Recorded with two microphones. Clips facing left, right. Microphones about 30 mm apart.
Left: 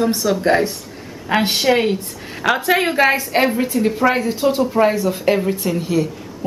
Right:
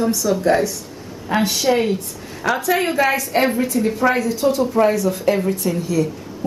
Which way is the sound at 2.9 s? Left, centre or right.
Left.